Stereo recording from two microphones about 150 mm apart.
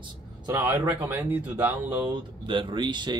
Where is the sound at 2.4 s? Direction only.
35° right (ahead or behind).